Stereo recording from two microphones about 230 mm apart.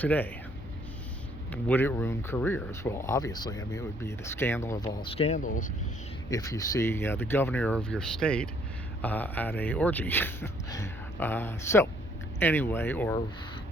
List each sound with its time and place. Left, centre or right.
0.0 s speech: centre
1.6 s speech: centre
5.1 s speech: left
6.3 s speech: centre